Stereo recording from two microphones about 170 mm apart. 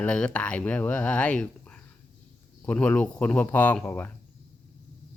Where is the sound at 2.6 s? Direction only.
5° left (ahead or behind).